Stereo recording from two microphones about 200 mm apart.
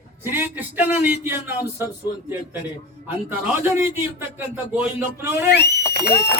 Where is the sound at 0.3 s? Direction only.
10° right (ahead or behind).